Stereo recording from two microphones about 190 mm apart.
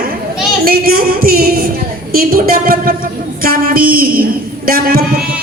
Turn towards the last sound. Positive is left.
turn(degrees=-50)  # may be behind; listen again after turning